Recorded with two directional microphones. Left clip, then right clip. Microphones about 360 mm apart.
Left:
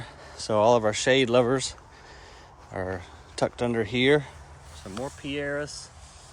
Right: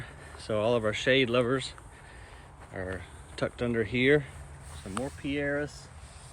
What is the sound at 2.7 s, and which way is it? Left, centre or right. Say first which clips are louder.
Speech: left 5 dB; left.